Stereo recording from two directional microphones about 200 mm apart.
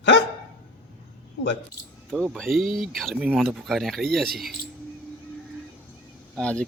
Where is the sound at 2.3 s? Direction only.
Centre (ahead or behind).